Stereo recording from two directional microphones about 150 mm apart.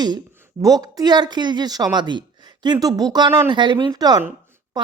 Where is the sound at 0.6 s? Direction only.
25° right (ahead or behind).